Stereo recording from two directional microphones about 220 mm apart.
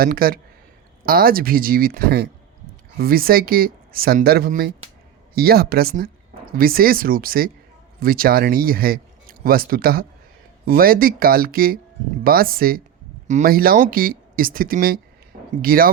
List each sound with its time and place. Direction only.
0.0 s speech: 40° right (ahead or behind)